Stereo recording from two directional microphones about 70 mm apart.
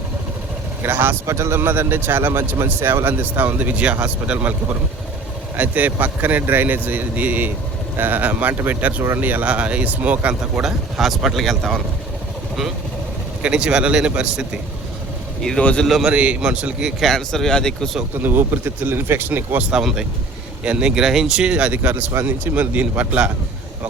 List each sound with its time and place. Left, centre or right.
0.8 s a man's voice: right
5.5 s a man's voice: right
10.6 s speech: centre
13.4 s speech: centre
15.4 s speech: centre
15.9 s speech: centre
16.1 s speech: centre
17.0 s speech: centre
18.2 s a man's voice: right
19.7 s a man's voice: centre